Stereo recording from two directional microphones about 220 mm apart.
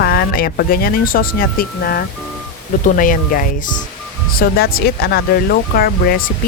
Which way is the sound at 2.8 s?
40° left (ahead or behind).